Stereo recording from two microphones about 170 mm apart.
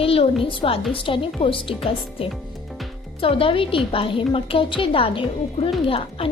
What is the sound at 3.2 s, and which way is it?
Speech, 30° left (ahead or behind).